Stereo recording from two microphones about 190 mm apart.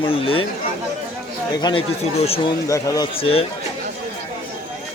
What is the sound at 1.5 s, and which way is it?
Speech, 20° left (ahead or behind).